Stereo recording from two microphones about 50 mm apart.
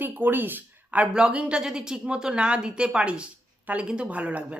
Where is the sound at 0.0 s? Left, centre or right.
Right.